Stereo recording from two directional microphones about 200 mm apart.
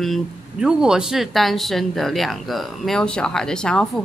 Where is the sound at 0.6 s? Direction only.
5° right (ahead or behind).